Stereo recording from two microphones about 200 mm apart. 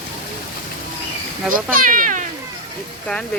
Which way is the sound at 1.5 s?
45° right (ahead or behind).